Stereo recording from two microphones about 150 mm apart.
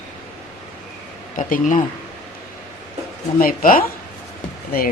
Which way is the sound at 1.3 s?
60° left (ahead or behind).